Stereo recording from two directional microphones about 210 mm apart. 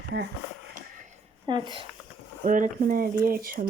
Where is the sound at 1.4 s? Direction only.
20° right (ahead or behind).